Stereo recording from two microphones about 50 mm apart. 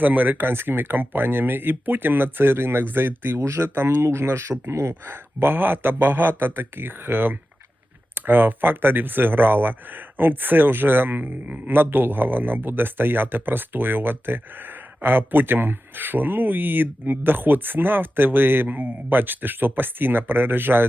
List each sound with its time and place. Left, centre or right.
0.0 s speech: right
5.1 s speech: right